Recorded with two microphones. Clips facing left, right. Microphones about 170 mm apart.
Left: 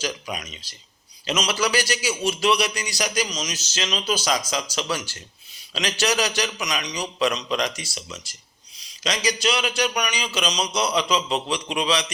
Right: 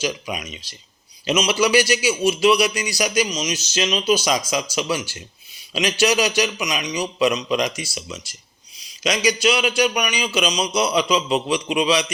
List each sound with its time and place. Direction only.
0.0 s a man's voice: 15° right (ahead or behind)
7.2 s a man's voice: 10° right (ahead or behind)
9.4 s a man's voice: 10° right (ahead or behind)